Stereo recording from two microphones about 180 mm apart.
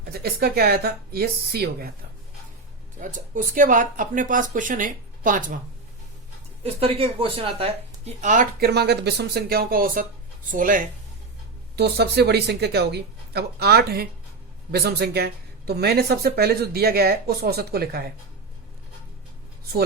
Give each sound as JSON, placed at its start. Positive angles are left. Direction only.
{"t": 0.0, "sound": "speech", "side_deg": -60}
{"t": 3.0, "sound": "speech", "side_deg": -45}
{"t": 6.6, "sound": "speech", "side_deg": -35}
{"t": 11.8, "sound": "speech", "side_deg": -65}